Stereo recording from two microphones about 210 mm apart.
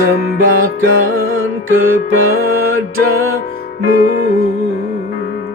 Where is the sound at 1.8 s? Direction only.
75° right (ahead or behind).